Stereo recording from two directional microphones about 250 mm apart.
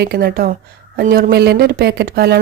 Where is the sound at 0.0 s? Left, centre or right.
Right.